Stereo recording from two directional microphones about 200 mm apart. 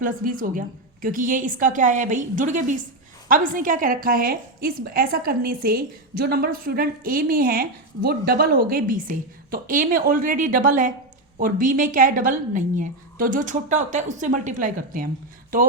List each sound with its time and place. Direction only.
0.0 s a woman's voice: 45° right (ahead or behind)